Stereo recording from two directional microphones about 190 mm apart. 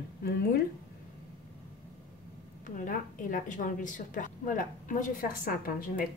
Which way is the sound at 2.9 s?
45° left (ahead or behind).